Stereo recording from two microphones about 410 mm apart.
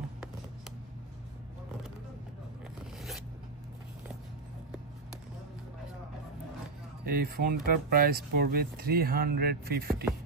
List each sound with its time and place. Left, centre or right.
7.1 s speech: right